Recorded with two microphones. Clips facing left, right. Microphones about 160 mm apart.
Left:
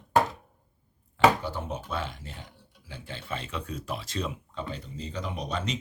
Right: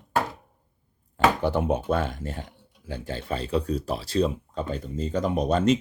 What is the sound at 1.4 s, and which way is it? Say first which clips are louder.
Speech: right 11 dB; 60° right (ahead or behind).